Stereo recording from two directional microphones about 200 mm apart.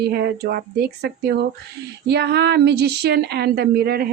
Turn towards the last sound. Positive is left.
turn(degrees=-50)  # may be behind; listen again after turning